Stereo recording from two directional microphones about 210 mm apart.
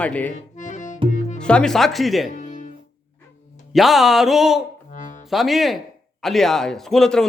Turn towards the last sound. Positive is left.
turn(degrees=0)  # may be behind; listen again after turning